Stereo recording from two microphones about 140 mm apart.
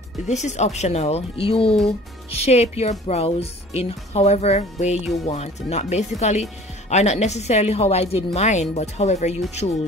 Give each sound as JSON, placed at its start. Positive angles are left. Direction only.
{"t": 0.3, "sound": "speech", "side_deg": 55}